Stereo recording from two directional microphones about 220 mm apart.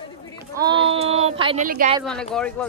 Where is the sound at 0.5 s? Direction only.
20° right (ahead or behind).